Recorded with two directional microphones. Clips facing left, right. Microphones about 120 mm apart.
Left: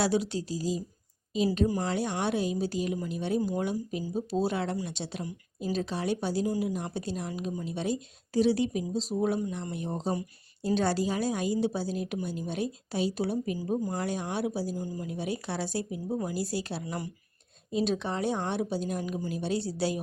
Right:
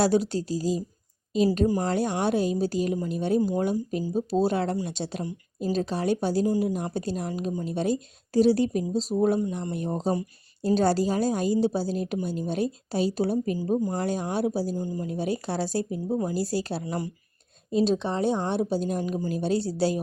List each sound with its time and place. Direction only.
0.0 s speech: 40° right (ahead or behind)
15.0 s speech: 40° right (ahead or behind)